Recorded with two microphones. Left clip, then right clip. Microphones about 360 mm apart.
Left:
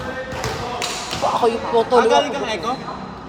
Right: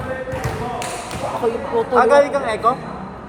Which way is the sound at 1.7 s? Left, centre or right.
Centre.